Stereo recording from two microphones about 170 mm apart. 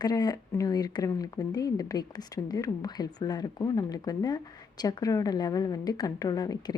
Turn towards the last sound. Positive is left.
turn(degrees=25)  # may be behind; listen again after turning